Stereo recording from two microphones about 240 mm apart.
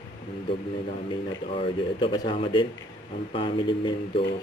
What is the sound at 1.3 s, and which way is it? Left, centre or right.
Speech, left.